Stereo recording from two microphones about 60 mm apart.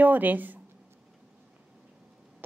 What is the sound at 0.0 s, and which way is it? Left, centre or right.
Speech, right.